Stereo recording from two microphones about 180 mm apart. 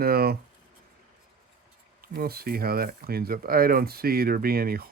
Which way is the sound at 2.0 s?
60° right (ahead or behind).